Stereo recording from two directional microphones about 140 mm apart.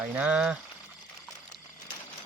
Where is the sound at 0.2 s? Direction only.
10° right (ahead or behind).